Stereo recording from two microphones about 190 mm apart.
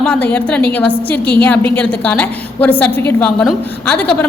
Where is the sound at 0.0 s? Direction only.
5° left (ahead or behind).